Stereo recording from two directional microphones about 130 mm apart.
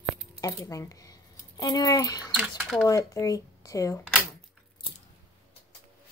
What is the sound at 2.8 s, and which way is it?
Speech, 25° left (ahead or behind).